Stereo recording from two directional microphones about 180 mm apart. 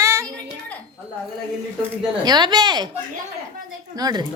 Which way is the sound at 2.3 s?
25° right (ahead or behind).